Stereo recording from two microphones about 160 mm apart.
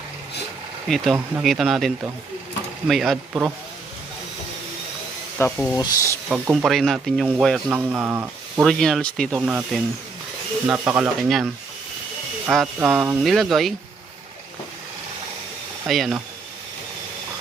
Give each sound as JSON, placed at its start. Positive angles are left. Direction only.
{"t": 0.9, "sound": "speech", "side_deg": 0}
{"t": 5.5, "sound": "speech", "side_deg": 5}
{"t": 5.7, "sound": "speech", "side_deg": 20}
{"t": 6.2, "sound": "speech", "side_deg": -10}
{"t": 8.6, "sound": "speech", "side_deg": 0}
{"t": 9.5, "sound": "speech", "side_deg": -5}
{"t": 12.5, "sound": "speech", "side_deg": 0}
{"t": 12.8, "sound": "speech", "side_deg": -15}
{"t": 15.9, "sound": "speech", "side_deg": 0}